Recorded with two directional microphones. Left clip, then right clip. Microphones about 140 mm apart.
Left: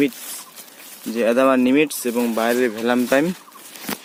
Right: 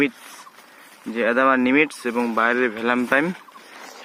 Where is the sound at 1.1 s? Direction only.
15° left (ahead or behind).